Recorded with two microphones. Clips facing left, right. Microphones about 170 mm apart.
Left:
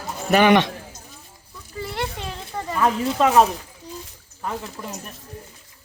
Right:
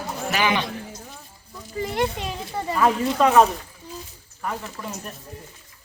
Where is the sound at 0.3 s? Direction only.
60° left (ahead or behind).